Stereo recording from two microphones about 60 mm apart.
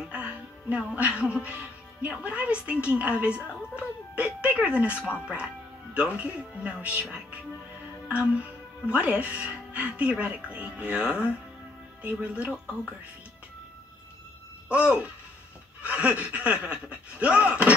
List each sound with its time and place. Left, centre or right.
0.1 s speech: right
15.8 s speech: right